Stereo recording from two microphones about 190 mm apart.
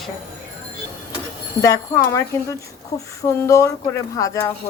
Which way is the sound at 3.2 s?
15° left (ahead or behind).